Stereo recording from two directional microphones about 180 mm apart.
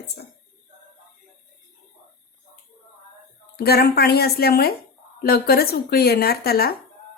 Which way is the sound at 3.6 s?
60° left (ahead or behind).